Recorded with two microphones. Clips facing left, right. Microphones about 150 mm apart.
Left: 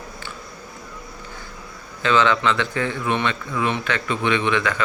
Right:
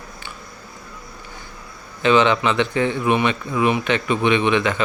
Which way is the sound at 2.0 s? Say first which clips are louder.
Right 3 dB; 20° right (ahead or behind).